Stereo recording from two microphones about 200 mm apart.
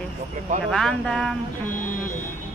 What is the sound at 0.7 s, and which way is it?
Speech, centre (ahead or behind).